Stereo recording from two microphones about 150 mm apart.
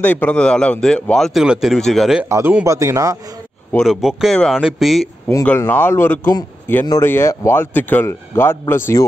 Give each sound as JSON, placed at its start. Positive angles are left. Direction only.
{"t": 0.0, "sound": "a man's voice", "side_deg": 10}
{"t": 2.2, "sound": "speech", "side_deg": -20}
{"t": 3.7, "sound": "a man's voice", "side_deg": 0}
{"t": 5.4, "sound": "a man's voice", "side_deg": 10}